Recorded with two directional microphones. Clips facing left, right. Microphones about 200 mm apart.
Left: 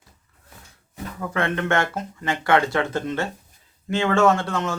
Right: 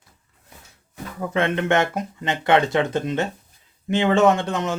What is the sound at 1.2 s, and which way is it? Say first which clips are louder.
Speech: right 3 dB; 20° right (ahead or behind).